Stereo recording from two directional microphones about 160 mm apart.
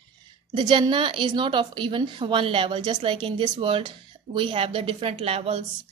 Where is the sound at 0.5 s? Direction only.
30° right (ahead or behind).